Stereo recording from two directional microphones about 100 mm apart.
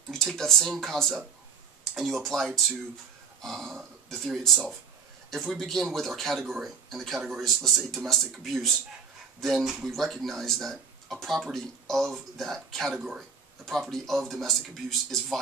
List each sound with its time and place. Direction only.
0.1 s speech: 5° left (ahead or behind)